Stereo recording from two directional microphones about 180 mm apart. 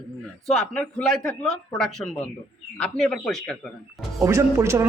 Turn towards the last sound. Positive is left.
turn(degrees=-15)  # may be behind; listen again after turning